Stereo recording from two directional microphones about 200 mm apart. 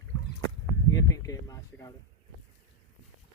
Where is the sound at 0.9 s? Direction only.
15° left (ahead or behind).